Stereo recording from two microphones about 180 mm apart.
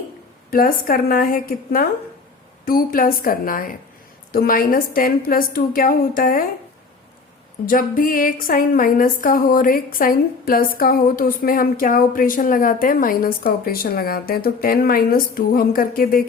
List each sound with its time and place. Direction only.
0.5 s speech: 50° left (ahead or behind)
7.6 s speech: 50° left (ahead or behind)